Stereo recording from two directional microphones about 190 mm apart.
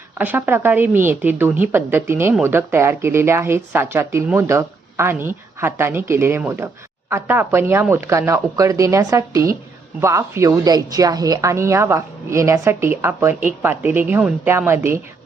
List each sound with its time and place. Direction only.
0.2 s a woman's voice: 10° right (ahead or behind)